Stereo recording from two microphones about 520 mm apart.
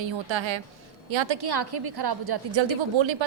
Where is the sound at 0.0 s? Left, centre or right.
Right.